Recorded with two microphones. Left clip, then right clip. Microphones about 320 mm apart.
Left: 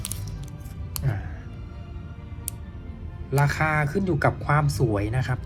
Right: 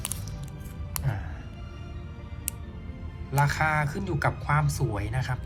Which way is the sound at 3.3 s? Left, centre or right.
Centre.